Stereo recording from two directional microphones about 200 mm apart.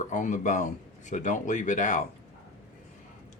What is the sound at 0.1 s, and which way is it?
Speech, 40° left (ahead or behind).